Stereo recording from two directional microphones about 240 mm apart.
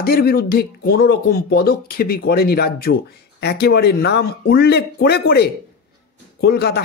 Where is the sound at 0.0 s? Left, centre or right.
Left.